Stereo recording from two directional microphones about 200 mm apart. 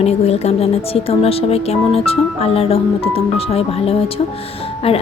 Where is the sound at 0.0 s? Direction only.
30° left (ahead or behind).